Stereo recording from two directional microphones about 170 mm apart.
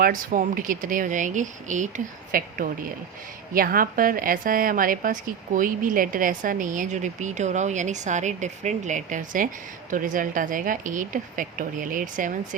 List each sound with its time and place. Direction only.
0.0 s a woman's voice: 55° right (ahead or behind)
3.5 s a woman's voice: 55° right (ahead or behind)